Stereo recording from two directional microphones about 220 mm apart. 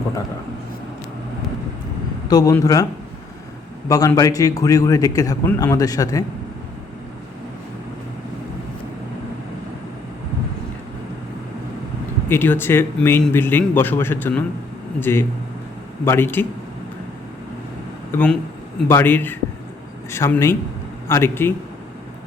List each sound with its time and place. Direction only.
2.3 s a man's voice: 15° left (ahead or behind)
3.8 s a man's voice: 15° left (ahead or behind)
12.3 s a man's voice: 10° left (ahead or behind)
18.1 s a man's voice: 10° left (ahead or behind)